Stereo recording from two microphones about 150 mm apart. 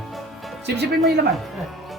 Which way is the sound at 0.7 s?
90° right.